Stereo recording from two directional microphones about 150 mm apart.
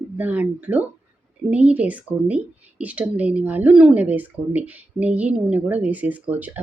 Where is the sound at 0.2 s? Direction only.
10° right (ahead or behind).